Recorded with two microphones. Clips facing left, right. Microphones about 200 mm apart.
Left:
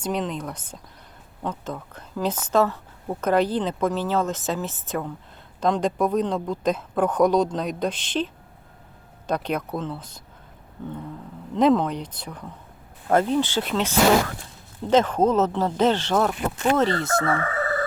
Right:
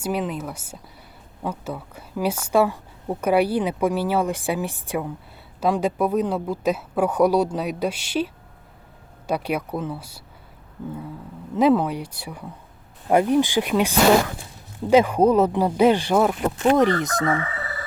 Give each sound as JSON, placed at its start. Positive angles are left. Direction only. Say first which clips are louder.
{"t": 0.0, "sound": "a woman's voice", "louder": "right 1 dB", "side_deg": -5}
{"t": 11.5, "sound": "a woman's voice", "louder": "right 1 dB", "side_deg": -10}
{"t": 17.4, "sound": "chicken", "louder": "left 7 dB", "side_deg": 50}